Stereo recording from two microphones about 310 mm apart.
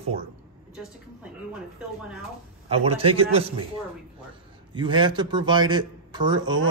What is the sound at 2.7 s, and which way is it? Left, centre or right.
Speech, centre.